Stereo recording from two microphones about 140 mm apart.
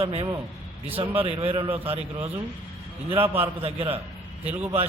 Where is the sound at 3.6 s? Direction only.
40° right (ahead or behind).